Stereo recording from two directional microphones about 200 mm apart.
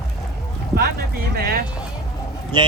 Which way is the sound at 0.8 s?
50° right (ahead or behind).